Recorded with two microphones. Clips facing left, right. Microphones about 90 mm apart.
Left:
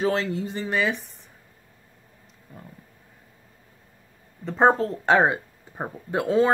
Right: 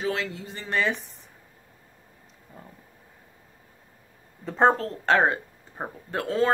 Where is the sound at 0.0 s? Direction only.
35° left (ahead or behind).